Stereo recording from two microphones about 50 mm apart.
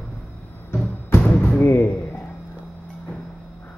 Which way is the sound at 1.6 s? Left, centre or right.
Left.